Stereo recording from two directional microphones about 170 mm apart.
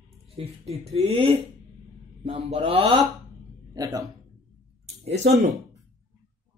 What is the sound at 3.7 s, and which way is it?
Speech, 20° right (ahead or behind).